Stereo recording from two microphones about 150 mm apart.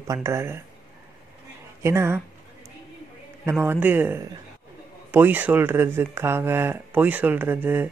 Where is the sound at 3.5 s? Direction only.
15° right (ahead or behind).